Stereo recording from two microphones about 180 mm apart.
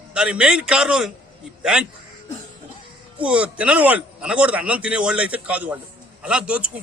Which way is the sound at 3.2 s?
5° right (ahead or behind).